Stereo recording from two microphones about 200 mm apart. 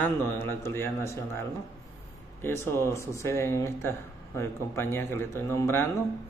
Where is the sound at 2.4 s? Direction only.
10° left (ahead or behind).